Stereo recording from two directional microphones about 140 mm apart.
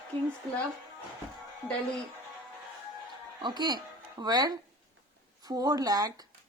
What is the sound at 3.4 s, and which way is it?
Speech, 30° right (ahead or behind).